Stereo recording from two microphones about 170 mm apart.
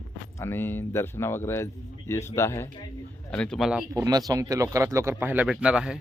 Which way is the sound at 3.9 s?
20° right (ahead or behind).